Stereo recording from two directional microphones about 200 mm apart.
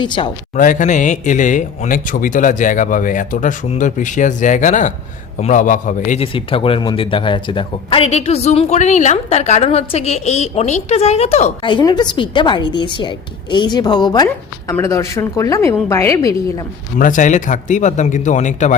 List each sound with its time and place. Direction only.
0.0 s speech: 25° left (ahead or behind)
0.5 s speech: 40° left (ahead or behind)
6.1 s speech: 30° left (ahead or behind)
17.0 s speech: 40° left (ahead or behind)